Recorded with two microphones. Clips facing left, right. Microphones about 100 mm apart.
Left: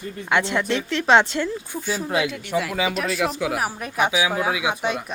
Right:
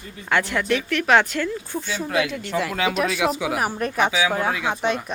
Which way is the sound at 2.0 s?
25° left (ahead or behind).